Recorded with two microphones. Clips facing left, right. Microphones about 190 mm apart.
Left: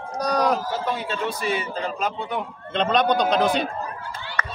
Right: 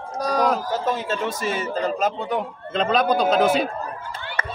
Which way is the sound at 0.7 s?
45° right (ahead or behind).